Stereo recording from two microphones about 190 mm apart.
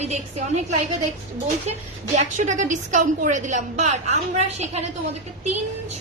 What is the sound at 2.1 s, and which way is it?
A woman's voice, 40° right (ahead or behind).